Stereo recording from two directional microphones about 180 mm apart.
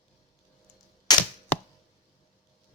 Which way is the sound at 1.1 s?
20° left (ahead or behind).